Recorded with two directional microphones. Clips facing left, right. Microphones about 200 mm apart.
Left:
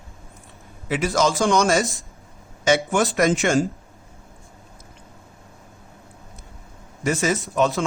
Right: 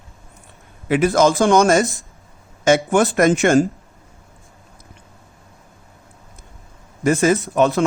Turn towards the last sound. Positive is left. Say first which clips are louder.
# right 5 dB
turn(degrees=-60)  # may be behind; listen again after turning